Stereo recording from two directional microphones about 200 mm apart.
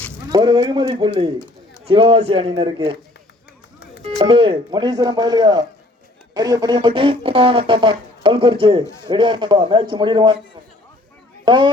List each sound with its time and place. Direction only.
0.3 s speech: 20° right (ahead or behind)
4.2 s speech: 25° right (ahead or behind)
11.4 s speech: 25° right (ahead or behind)